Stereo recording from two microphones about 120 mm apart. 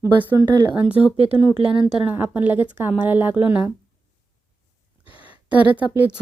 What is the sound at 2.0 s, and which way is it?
A woman's voice, 15° right (ahead or behind).